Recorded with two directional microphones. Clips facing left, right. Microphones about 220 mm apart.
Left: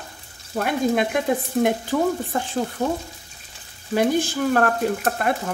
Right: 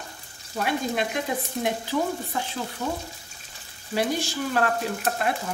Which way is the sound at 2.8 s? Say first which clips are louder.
Left 6 dB; 40° left (ahead or behind).